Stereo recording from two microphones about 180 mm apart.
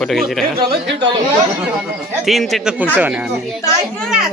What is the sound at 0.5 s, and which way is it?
Speech, 60° right (ahead or behind).